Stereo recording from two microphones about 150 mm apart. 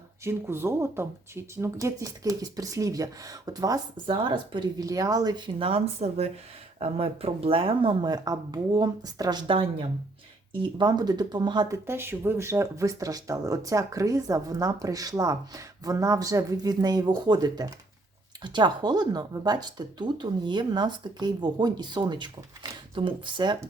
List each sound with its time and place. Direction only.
0.3 s speech: 15° right (ahead or behind)
11.9 s speech: 15° right (ahead or behind); by 23.6 s 30° right (ahead or behind)